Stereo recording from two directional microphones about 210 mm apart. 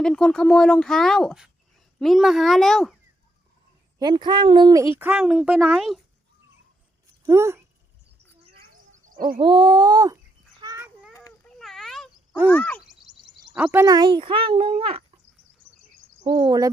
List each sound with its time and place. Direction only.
0.0 s speech: 5° left (ahead or behind)
3.9 s a child's voice: 20° right (ahead or behind)
4.9 s speech: 5° right (ahead or behind)
7.3 s speech: 15° right (ahead or behind)
9.4 s a child's voice: 25° right (ahead or behind)
10.6 s a sound: 15° right (ahead or behind)
11.1 s a sound: 15° left (ahead or behind)
11.6 s cat: centre (ahead or behind)
12.5 s speech: 5° left (ahead or behind)
13.5 s a child's voice: 5° right (ahead or behind); by 15.0 s 25° right (ahead or behind)
16.2 s a child's voice: 25° right (ahead or behind)